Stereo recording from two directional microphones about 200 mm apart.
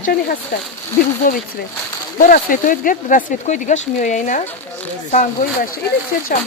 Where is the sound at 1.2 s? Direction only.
45° left (ahead or behind).